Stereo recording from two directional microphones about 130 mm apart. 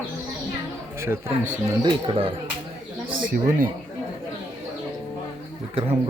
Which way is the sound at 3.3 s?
90° right.